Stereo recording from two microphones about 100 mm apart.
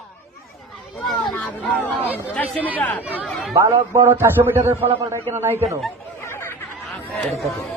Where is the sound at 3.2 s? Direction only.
Centre (ahead or behind).